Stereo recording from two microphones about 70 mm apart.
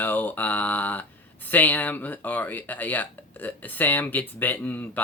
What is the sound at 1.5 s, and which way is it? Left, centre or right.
Speech, left.